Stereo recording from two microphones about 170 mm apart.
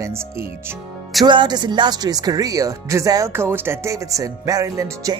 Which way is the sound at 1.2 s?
25° right (ahead or behind).